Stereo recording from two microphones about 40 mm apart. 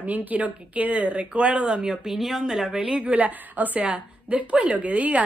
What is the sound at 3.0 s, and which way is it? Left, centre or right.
Speech, right.